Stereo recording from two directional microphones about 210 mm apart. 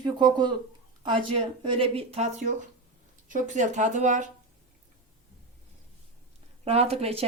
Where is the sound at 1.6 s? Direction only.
25° right (ahead or behind).